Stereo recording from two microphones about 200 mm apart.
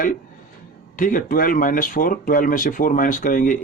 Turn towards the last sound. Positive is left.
turn(degrees=40)  # may be behind; listen again after turning